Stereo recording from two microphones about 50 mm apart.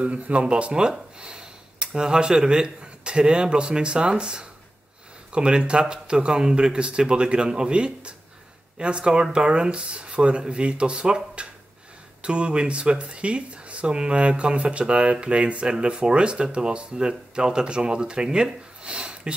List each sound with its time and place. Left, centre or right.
0.0 s speech: right